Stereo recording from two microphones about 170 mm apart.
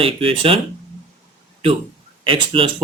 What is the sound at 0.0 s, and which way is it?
Speech, 35° right (ahead or behind).